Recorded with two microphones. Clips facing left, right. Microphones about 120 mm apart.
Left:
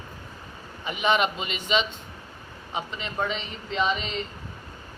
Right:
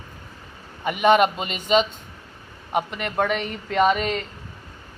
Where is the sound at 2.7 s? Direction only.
60° right (ahead or behind).